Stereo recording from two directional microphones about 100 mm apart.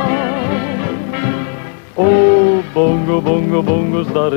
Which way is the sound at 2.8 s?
25° right (ahead or behind).